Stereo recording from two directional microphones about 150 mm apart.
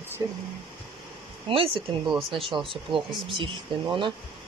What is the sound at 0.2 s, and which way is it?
Speech, 20° right (ahead or behind).